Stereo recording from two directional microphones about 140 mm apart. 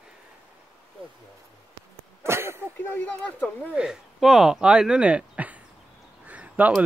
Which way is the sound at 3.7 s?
5° right (ahead or behind).